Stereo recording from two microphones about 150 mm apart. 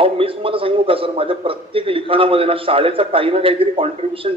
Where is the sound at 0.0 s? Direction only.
35° right (ahead or behind).